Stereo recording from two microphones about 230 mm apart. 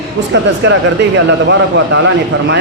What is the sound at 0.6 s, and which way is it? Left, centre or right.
Speech, right.